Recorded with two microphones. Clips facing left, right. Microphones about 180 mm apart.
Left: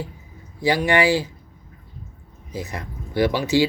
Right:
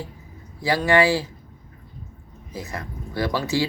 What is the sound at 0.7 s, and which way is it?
Speech, 20° left (ahead or behind).